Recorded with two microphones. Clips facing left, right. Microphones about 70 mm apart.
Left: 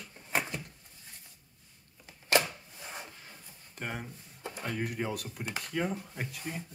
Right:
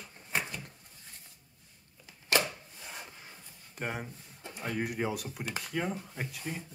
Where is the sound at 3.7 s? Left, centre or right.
Centre.